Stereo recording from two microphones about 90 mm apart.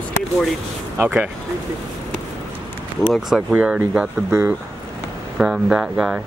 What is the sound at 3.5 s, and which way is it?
Speech, 15° right (ahead or behind).